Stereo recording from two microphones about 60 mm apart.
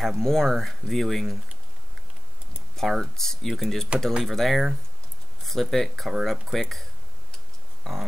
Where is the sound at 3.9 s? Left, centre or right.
Centre.